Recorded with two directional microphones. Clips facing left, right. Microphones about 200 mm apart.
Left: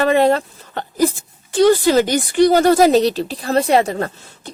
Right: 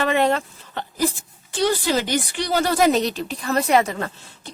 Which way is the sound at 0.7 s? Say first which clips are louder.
Left 6 dB; 45° left (ahead or behind).